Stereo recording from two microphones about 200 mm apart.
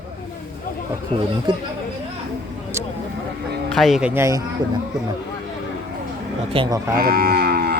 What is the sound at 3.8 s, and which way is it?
Speech, centre (ahead or behind).